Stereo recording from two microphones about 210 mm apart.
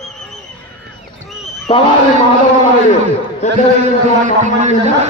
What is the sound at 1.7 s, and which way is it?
Speech, 25° left (ahead or behind).